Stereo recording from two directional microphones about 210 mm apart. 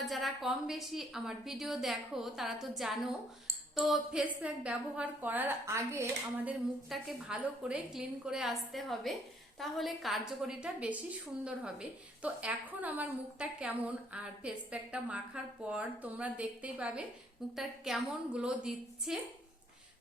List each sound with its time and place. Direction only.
0.0 s a woman's voice: centre (ahead or behind)